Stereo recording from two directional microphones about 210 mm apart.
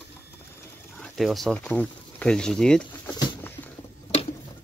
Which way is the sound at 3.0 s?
20° left (ahead or behind).